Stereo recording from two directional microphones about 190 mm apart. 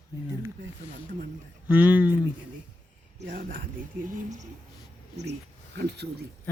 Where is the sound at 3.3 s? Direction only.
45° right (ahead or behind).